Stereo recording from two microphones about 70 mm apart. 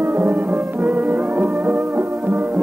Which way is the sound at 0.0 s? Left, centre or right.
Right.